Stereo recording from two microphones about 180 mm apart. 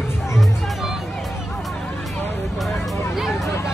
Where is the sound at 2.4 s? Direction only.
Centre (ahead or behind).